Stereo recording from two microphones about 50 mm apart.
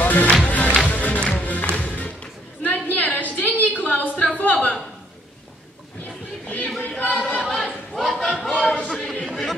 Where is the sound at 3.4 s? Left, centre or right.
Left.